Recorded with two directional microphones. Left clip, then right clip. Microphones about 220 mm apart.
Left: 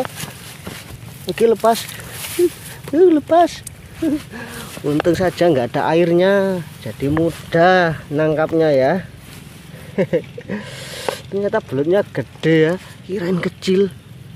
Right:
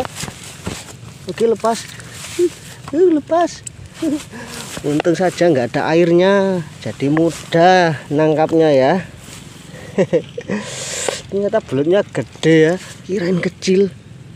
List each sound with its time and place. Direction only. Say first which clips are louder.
1.2 s speech: left 2 dB; 20° left (ahead or behind)
3.0 s speech: left 2 dB; 15° left (ahead or behind)
5.0 s speech: right 1 dB; 5° right (ahead or behind)